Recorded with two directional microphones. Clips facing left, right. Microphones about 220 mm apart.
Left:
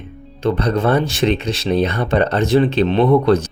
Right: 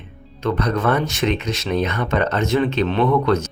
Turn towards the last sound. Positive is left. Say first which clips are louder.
# left 4 dB
turn(degrees=35)  # may be behind; listen again after turning